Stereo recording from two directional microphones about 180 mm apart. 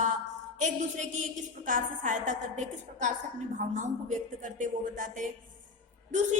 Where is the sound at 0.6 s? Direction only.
45° right (ahead or behind).